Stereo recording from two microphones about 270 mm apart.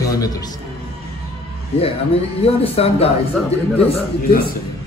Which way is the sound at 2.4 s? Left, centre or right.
Left.